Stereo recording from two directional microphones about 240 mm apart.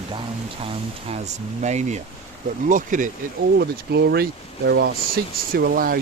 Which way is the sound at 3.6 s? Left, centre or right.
Right.